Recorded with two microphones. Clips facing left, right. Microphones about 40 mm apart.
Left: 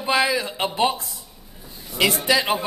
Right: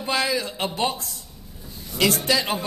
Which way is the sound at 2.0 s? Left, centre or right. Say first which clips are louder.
Left 2 dB; centre.